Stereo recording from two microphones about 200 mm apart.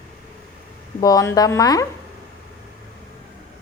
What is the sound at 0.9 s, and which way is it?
Speech, 20° left (ahead or behind).